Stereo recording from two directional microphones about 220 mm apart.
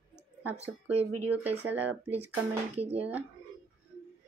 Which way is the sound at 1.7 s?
10° right (ahead or behind).